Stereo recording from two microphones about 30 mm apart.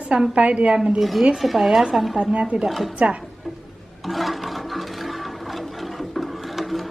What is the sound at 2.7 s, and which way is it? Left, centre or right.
Speech, centre.